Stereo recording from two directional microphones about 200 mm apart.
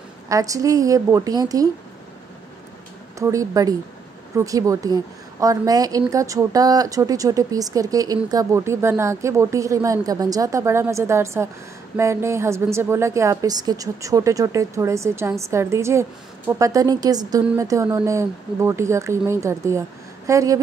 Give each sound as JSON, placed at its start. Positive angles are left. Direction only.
{"t": 0.3, "sound": "a woman's voice", "side_deg": -15}
{"t": 3.2, "sound": "a woman's voice", "side_deg": -15}